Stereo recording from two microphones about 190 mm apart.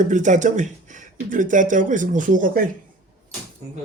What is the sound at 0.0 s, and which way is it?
Speech, 40° right (ahead or behind).